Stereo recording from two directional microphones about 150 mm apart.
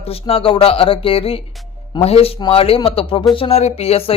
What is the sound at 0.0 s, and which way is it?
Speech, 40° left (ahead or behind).